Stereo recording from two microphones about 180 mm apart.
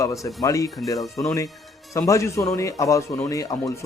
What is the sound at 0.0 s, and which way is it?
A man's voice, 15° left (ahead or behind).